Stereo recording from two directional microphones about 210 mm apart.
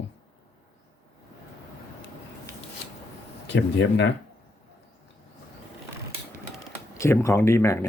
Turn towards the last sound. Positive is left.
turn(degrees=15)  # may be behind; listen again after turning